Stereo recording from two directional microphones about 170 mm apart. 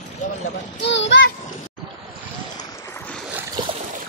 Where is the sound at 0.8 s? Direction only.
90° left.